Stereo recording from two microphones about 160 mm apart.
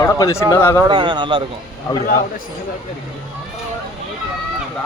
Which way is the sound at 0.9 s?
30° right (ahead or behind).